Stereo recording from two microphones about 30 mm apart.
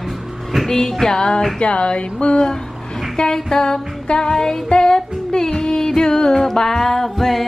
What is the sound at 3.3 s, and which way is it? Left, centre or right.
Music, left.